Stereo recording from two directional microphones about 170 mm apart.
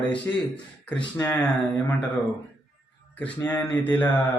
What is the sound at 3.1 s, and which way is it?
A man's voice, 10° left (ahead or behind).